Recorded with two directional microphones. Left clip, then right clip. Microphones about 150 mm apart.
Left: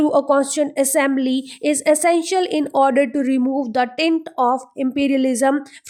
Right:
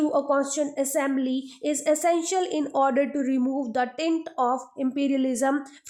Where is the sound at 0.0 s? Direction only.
30° left (ahead or behind).